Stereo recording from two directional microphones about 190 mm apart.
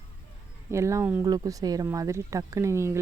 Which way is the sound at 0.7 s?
15° right (ahead or behind).